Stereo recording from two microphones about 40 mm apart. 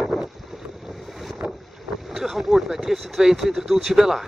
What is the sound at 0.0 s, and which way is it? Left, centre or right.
Boat, centre.